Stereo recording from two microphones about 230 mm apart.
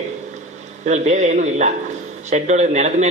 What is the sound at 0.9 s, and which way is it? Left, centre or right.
A man's voice, right.